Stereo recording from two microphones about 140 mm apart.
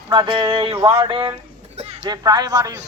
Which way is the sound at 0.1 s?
35° right (ahead or behind).